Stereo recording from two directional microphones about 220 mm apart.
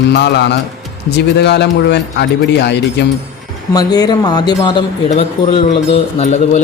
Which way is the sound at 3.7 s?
15° left (ahead or behind).